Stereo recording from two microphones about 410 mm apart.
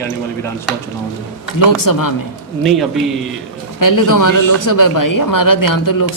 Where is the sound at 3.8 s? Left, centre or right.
Left.